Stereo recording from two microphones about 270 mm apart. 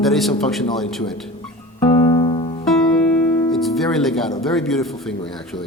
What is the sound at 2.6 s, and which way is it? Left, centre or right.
Music, centre.